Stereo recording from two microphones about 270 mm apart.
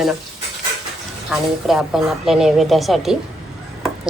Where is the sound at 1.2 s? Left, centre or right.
Centre.